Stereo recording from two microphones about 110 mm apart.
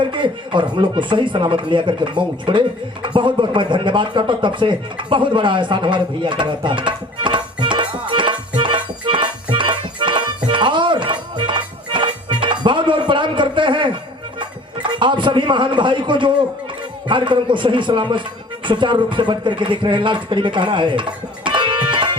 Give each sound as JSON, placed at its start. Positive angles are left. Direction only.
{"t": 0.0, "sound": "speech", "side_deg": -50}
{"t": 8.1, "sound": "music", "side_deg": -50}
{"t": 17.1, "sound": "speech", "side_deg": -50}